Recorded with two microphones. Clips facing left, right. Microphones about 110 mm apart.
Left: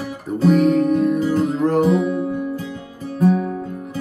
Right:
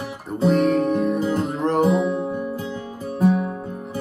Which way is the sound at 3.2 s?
20° right (ahead or behind).